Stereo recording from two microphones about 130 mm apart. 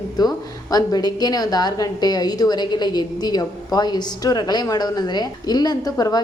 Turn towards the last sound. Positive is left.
turn(degrees=30)  # may be behind; listen again after turning